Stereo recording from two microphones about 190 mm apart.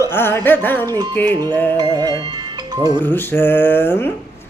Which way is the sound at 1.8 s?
20° right (ahead or behind).